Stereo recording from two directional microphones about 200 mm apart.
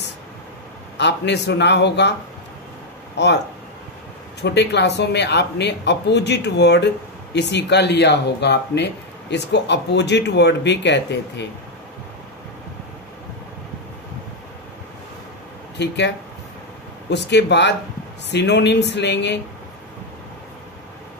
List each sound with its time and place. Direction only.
0.9 s speech: 60° left (ahead or behind)
3.2 s speech: 60° left (ahead or behind)
4.4 s speech: 60° left (ahead or behind)
15.8 s speech: 60° left (ahead or behind)
17.1 s speech: 60° left (ahead or behind)